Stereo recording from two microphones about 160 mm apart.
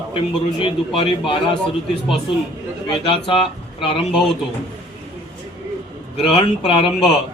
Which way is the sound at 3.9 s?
Centre (ahead or behind).